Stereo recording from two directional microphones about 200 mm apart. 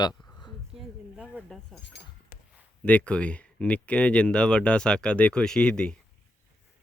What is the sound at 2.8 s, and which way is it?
Speech, 5° left (ahead or behind).